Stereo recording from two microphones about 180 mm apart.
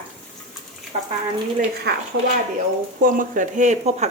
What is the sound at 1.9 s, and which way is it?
Speech, 65° right (ahead or behind).